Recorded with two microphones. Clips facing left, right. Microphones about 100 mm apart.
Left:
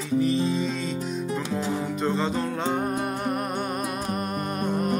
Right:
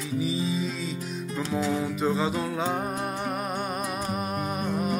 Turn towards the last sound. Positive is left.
turn(degrees=0)  # may be behind; listen again after turning